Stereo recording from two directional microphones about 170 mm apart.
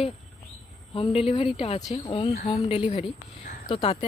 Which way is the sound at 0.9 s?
30° left (ahead or behind).